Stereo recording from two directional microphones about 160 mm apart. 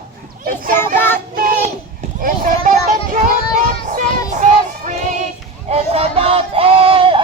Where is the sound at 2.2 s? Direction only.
60° right (ahead or behind).